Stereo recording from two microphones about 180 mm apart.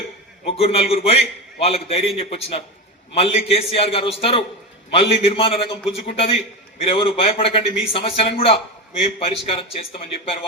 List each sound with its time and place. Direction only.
0.4 s a man's voice: 35° left (ahead or behind)